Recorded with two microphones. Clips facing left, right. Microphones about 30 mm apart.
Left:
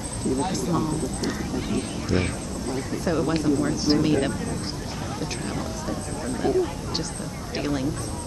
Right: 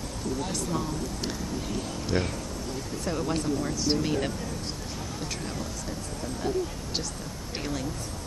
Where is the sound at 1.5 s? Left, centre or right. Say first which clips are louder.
Left 5 dB; left.